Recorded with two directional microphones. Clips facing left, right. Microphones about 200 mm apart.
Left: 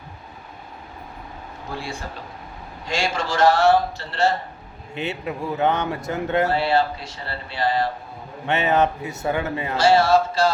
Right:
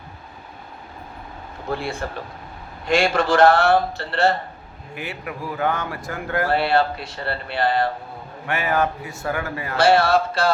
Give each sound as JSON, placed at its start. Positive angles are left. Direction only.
{"t": 1.7, "sound": "a man's voice", "side_deg": -60}
{"t": 4.9, "sound": "speech", "side_deg": 25}
{"t": 6.5, "sound": "a man's voice", "side_deg": -60}
{"t": 8.4, "sound": "speech", "side_deg": 20}
{"t": 9.7, "sound": "a man's voice", "side_deg": -60}